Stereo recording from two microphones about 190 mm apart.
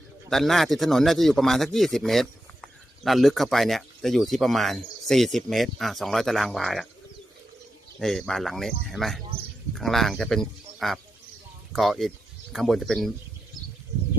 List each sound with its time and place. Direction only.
0.3 s speech: centre (ahead or behind)
7.9 s speech: centre (ahead or behind)